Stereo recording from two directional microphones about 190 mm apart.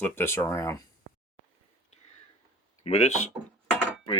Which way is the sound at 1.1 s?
60° right (ahead or behind).